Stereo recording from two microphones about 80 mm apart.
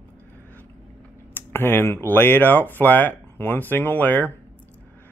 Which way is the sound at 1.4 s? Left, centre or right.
Left.